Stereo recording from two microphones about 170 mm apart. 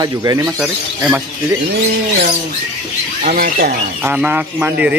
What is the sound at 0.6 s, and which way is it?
Speech, 5° right (ahead or behind).